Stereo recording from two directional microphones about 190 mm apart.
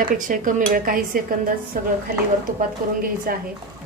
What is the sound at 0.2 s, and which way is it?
A woman's voice, 45° right (ahead or behind).